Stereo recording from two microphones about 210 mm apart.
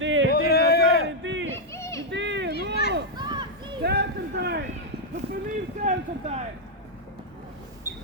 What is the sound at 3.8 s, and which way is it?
Speech, 50° right (ahead or behind).